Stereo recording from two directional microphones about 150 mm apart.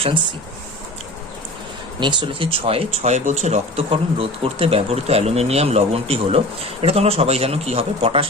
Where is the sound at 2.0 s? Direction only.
30° right (ahead or behind).